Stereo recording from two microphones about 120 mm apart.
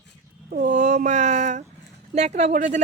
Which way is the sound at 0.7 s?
85° right.